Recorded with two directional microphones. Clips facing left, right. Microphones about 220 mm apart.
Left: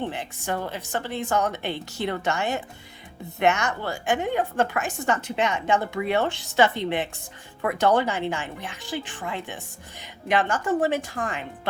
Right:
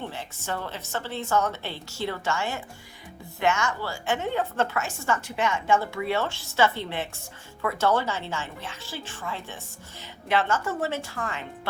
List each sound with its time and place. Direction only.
0.1 s a woman's voice: 15° left (ahead or behind)